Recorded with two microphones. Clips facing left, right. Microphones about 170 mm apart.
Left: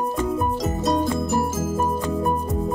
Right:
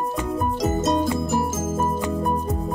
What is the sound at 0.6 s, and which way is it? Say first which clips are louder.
Music: right 3 dB; centre (ahead or behind).